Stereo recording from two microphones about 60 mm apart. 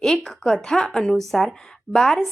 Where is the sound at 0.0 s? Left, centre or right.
Centre.